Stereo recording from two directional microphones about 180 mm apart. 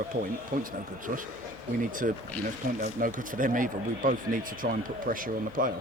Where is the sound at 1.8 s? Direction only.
50° right (ahead or behind).